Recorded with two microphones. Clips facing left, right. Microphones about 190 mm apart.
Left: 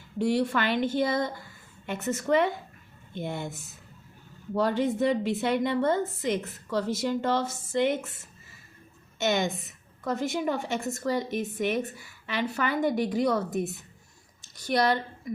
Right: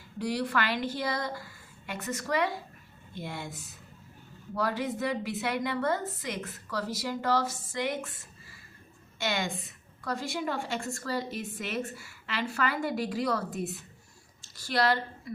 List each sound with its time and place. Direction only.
0.2 s a woman's voice: 25° left (ahead or behind)